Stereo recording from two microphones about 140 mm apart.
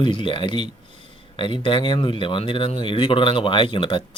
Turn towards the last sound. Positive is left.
turn(degrees=35)  # may be behind; listen again after turning